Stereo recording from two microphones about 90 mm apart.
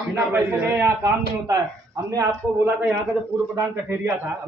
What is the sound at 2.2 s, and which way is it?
A man's voice, 30° right (ahead or behind).